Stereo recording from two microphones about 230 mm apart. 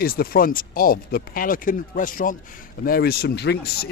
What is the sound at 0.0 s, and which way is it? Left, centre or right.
Speech, left.